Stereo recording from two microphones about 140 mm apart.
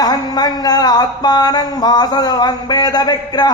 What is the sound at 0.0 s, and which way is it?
A man's voice, 30° left (ahead or behind).